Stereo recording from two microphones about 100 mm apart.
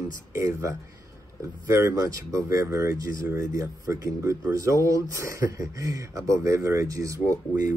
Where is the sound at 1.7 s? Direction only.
30° right (ahead or behind).